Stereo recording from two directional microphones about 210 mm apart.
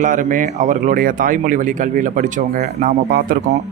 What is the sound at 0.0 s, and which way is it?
Speech, 40° right (ahead or behind).